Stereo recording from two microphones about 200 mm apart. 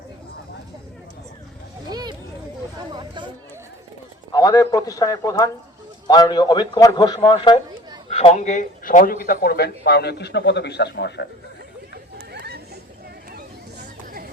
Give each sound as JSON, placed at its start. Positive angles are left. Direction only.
{"t": 1.9, "sound": "a sound", "side_deg": -20}
{"t": 4.3, "sound": "a man's voice", "side_deg": 15}
{"t": 12.3, "sound": "chatter", "side_deg": -55}